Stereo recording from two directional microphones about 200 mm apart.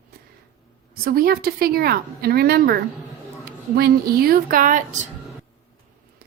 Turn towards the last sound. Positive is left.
turn(degrees=-40)  # may be behind; listen again after turning